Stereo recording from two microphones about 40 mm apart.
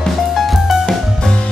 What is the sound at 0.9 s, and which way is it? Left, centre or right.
Music, centre.